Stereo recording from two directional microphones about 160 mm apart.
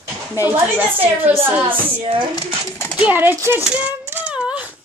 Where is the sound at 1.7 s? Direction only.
35° right (ahead or behind).